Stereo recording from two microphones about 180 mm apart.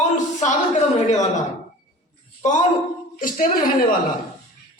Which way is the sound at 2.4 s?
45° left (ahead or behind).